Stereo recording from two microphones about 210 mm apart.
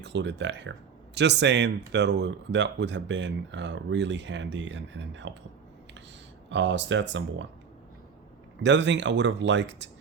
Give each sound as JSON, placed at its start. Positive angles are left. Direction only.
{"t": 0.0, "sound": "speech", "side_deg": -55}
{"t": 6.5, "sound": "speech", "side_deg": -60}
{"t": 8.6, "sound": "speech", "side_deg": -60}